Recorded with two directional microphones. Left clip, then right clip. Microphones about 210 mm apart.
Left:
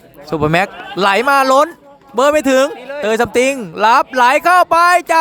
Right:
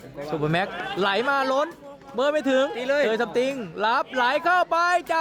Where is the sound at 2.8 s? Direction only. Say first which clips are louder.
Right 3 dB; 50° right (ahead or behind).